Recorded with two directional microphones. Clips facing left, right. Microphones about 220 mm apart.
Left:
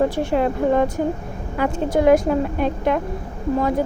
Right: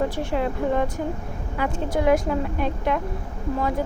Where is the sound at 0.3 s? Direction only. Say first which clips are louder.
Left 5 dB; 45° left (ahead or behind).